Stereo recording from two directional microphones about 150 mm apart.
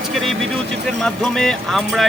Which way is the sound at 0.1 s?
Centre (ahead or behind).